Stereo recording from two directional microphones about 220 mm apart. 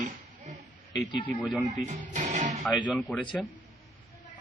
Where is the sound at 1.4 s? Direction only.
Centre (ahead or behind).